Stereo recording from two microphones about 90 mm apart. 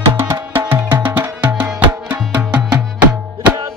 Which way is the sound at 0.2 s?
30° right (ahead or behind).